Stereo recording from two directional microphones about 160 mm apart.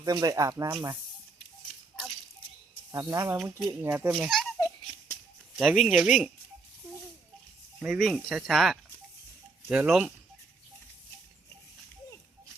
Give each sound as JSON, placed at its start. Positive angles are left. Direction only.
{"t": 0.0, "sound": "speech", "side_deg": -25}
{"t": 2.9, "sound": "speech", "side_deg": -20}
{"t": 3.3, "sound": "speech", "side_deg": -5}
{"t": 4.1, "sound": "speech", "side_deg": 0}
{"t": 5.5, "sound": "speech", "side_deg": 0}
{"t": 7.8, "sound": "speech", "side_deg": -5}